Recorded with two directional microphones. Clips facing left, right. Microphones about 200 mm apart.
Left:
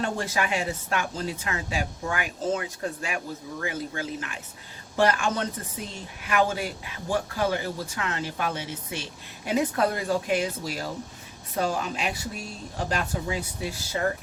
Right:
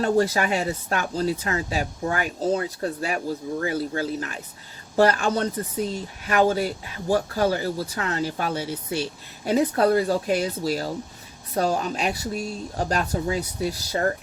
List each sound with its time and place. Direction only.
0.0 s speech: 40° right (ahead or behind)